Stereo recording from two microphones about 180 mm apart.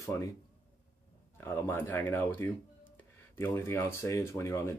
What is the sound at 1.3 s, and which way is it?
Speech, 10° left (ahead or behind).